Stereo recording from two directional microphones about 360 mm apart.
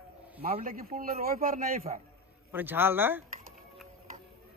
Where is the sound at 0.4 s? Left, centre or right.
Right.